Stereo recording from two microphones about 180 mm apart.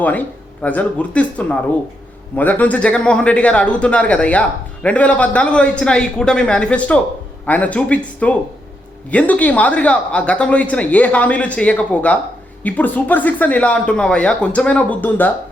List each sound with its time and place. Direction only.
0.0 s a man's voice: 10° left (ahead or behind)